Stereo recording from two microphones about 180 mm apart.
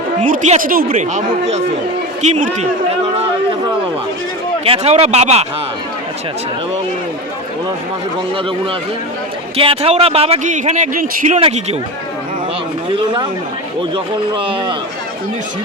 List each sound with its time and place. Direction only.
0.2 s speech: 40° right (ahead or behind)
4.6 s speech: 35° right (ahead or behind)
9.6 s speech: 30° right (ahead or behind)
11.3 s speech: 35° right (ahead or behind)
12.9 s a man's voice: 25° right (ahead or behind)